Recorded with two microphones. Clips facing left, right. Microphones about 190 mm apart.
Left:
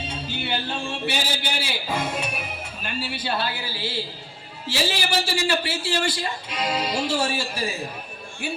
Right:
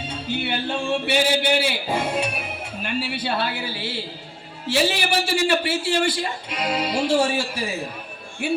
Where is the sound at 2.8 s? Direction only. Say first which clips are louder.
Right 4 dB; 65° right (ahead or behind).